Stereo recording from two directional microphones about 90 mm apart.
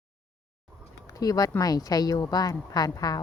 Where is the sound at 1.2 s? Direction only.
40° left (ahead or behind).